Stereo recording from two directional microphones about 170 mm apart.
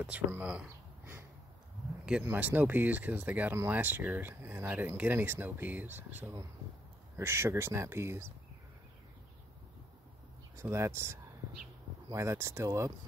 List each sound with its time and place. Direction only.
0.0 s speech: 10° right (ahead or behind)
0.7 s a sound: 10° right (ahead or behind)
2.0 s speech: 10° right (ahead or behind)
10.5 s speech: 15° right (ahead or behind)